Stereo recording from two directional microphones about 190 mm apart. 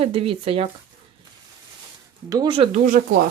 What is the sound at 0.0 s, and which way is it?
Speech, 30° right (ahead or behind).